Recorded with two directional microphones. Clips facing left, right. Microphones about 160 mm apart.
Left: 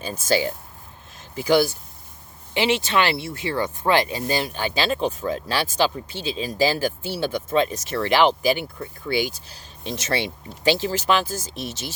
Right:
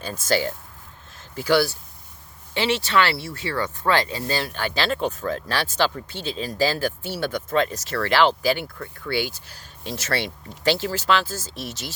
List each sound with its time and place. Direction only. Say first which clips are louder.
0.0 s speech: left 1 dB; 15° left (ahead or behind)